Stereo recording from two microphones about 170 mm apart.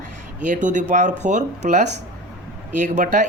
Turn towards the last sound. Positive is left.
turn(degrees=-45)  # may be behind; listen again after turning